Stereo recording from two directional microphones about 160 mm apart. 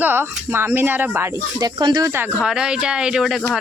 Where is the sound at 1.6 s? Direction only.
25° right (ahead or behind).